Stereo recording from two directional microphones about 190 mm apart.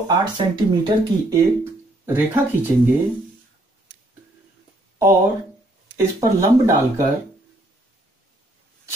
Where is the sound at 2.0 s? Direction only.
10° right (ahead or behind).